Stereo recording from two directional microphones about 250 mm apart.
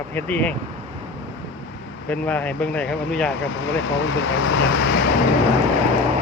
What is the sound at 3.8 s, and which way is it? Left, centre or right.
Speech, left.